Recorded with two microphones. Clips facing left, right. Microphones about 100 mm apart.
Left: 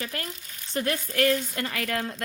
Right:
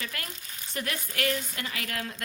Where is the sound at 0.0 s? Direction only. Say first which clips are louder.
Left 4 dB; 35° left (ahead or behind).